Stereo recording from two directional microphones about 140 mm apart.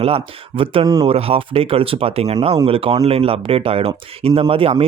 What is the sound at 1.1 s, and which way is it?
Speech, 45° right (ahead or behind).